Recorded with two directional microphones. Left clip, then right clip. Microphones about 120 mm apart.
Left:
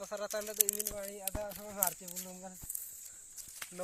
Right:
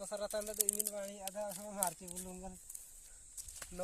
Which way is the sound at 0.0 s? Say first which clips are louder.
Left 2 dB; 25° left (ahead or behind).